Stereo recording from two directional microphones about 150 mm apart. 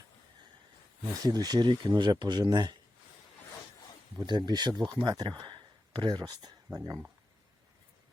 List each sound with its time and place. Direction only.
1.2 s speech: 25° right (ahead or behind)
4.2 s speech: 30° right (ahead or behind)